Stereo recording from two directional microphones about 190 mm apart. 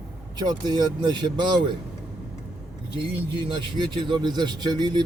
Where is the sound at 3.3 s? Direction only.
25° right (ahead or behind).